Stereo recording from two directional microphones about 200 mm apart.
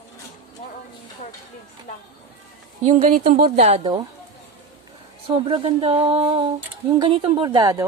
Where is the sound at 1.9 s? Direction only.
35° left (ahead or behind).